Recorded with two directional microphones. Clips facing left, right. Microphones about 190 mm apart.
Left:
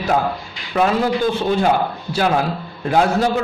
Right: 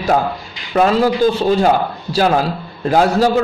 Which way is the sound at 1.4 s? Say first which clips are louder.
Right 3 dB; 35° right (ahead or behind).